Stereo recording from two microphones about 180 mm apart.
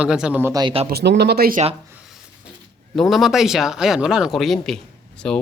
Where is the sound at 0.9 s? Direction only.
65° right (ahead or behind).